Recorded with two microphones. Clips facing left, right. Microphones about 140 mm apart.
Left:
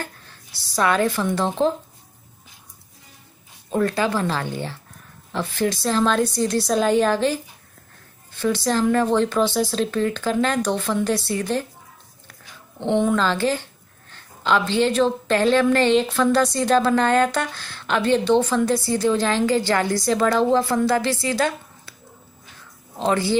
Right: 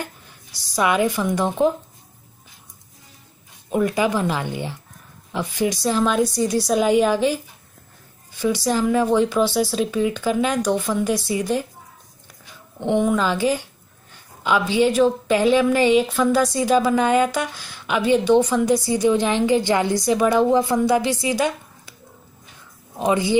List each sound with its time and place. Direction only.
0.0 s speech: 15° right (ahead or behind)
3.7 s a woman's voice: 15° right (ahead or behind)
12.7 s a woman's voice: 5° right (ahead or behind)
22.9 s a woman's voice: 15° right (ahead or behind)